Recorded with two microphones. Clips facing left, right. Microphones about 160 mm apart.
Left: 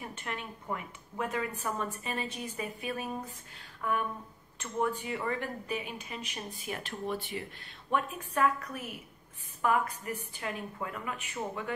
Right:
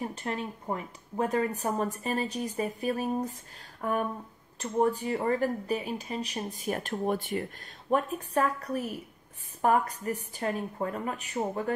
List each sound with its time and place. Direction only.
0.0 s a woman's voice: 35° right (ahead or behind)